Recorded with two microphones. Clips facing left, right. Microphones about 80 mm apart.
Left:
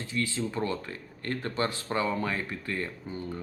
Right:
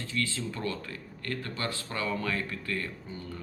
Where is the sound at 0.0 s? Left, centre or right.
Centre.